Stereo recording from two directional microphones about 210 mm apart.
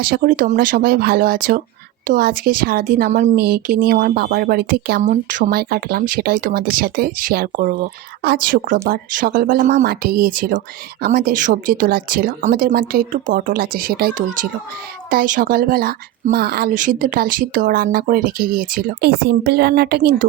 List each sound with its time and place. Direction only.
0.0 s speech: 45° right (ahead or behind)